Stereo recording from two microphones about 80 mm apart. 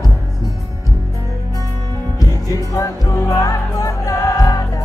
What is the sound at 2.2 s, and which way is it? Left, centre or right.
Music, left.